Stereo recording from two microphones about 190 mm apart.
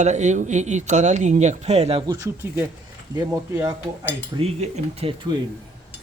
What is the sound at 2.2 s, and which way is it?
Speech, 15° right (ahead or behind).